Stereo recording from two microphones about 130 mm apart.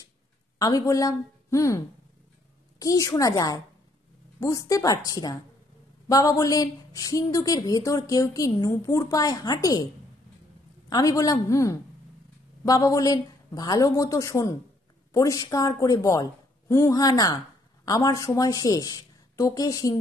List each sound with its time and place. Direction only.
0.6 s a woman's voice: 25° left (ahead or behind)
2.8 s a woman's voice: 25° left (ahead or behind)
10.9 s a woman's voice: 30° left (ahead or behind)